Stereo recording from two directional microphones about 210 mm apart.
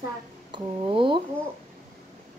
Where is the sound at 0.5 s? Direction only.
25° right (ahead or behind).